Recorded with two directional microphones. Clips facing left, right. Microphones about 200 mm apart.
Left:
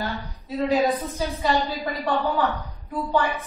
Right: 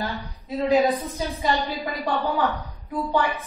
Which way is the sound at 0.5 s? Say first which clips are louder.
Right 1 dB; 20° right (ahead or behind).